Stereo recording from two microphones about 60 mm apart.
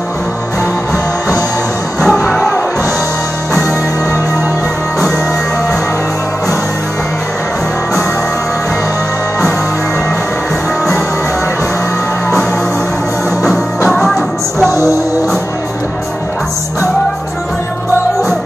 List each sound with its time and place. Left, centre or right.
2.0 s music: centre
13.8 s music: centre